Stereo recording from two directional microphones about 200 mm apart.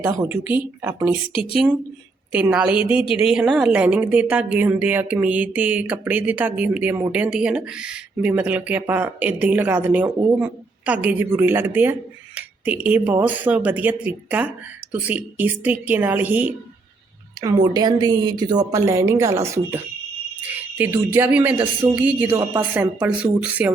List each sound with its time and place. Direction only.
0.0 s a woman's voice: 10° right (ahead or behind)
2.3 s a woman's voice: 5° right (ahead or behind)
17.4 s a woman's voice: 20° right (ahead or behind)